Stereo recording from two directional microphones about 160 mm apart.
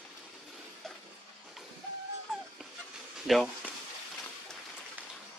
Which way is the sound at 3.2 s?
Centre (ahead or behind).